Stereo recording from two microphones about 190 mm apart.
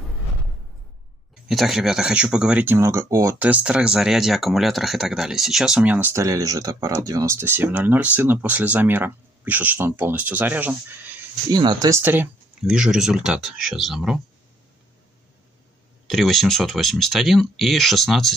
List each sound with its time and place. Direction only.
1.5 s speech: centre (ahead or behind)
11.5 s speech: 20° right (ahead or behind); by 14.2 s centre (ahead or behind)
16.1 s speech: centre (ahead or behind)